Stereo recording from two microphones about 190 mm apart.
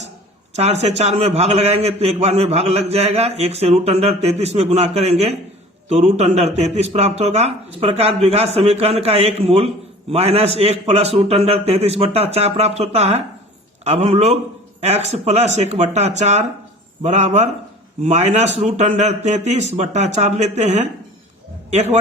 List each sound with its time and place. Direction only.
0.5 s a man's voice: 35° right (ahead or behind)